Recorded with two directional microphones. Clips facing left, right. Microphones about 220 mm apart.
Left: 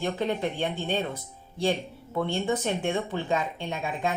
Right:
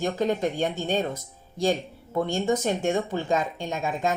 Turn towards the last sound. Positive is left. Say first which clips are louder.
# right 3 dB
turn(degrees=-45)  # may be behind; listen again after turning